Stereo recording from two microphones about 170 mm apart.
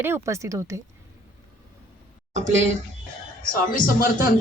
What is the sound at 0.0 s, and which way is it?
Speech, 15° right (ahead or behind).